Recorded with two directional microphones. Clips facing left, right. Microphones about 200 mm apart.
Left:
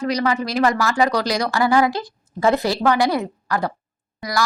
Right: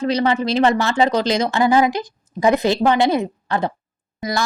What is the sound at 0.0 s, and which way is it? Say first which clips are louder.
Speech: right 3 dB; 25° right (ahead or behind).